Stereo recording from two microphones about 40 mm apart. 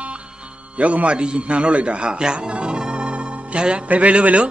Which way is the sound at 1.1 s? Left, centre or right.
Right.